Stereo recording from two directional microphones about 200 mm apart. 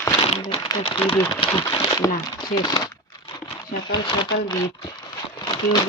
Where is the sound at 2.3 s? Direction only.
20° left (ahead or behind).